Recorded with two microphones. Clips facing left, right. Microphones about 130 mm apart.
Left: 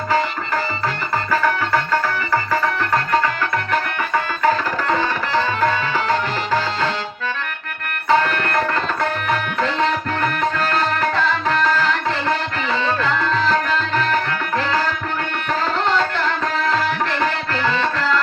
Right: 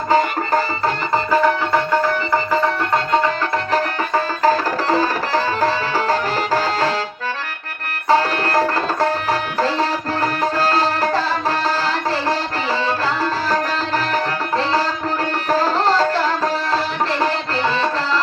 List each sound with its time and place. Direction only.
1.1 s music: 20° right (ahead or behind)
3.7 s music: 35° right (ahead or behind)
8.0 s tabla: 35° right (ahead or behind)
10.6 s music: 35° right (ahead or behind)
13.0 s tabla: 35° right (ahead or behind)
16.7 s music: 30° right (ahead or behind)